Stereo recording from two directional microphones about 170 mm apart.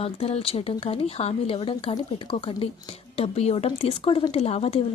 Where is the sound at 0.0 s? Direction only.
35° left (ahead or behind).